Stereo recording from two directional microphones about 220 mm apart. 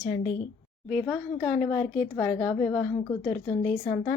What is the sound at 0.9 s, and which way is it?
A woman's voice, centre (ahead or behind).